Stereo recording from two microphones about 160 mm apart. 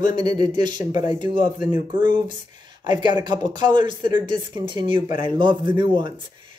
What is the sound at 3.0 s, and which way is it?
Speech, 25° right (ahead or behind).